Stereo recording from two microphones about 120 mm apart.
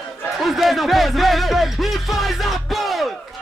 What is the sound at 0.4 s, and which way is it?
Speech, centre (ahead or behind).